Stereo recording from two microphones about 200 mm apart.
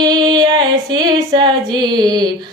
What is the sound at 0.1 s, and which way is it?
Female singing, 20° right (ahead or behind).